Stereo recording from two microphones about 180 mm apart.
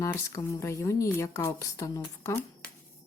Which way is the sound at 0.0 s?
20° left (ahead or behind).